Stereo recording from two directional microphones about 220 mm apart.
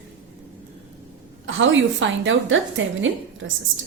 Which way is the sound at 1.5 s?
60° right (ahead or behind).